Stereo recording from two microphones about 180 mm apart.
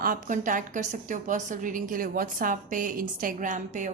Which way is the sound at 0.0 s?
50° right (ahead or behind).